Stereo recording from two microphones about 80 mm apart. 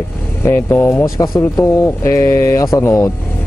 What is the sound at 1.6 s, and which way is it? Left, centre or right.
Speech, left.